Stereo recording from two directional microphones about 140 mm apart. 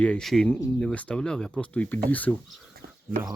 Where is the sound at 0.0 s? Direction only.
5° left (ahead or behind).